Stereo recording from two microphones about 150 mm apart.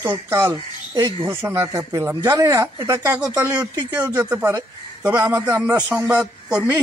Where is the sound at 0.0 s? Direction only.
20° right (ahead or behind).